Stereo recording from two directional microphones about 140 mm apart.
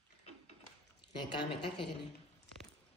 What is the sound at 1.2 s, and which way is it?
Speech, 35° left (ahead or behind).